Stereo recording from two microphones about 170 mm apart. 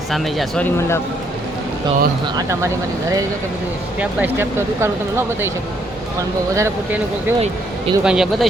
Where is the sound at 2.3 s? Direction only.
20° right (ahead or behind).